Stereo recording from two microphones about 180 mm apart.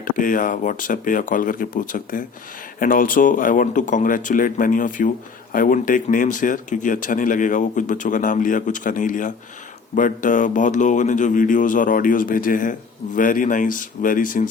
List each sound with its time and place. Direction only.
0.0 s speech: 50° left (ahead or behind)